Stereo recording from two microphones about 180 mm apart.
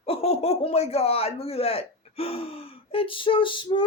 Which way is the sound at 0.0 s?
35° left (ahead or behind).